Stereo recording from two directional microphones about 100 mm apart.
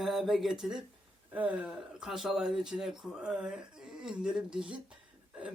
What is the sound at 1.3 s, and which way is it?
Speech, 15° right (ahead or behind).